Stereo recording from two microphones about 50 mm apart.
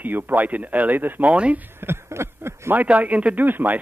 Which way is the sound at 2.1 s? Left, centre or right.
Right.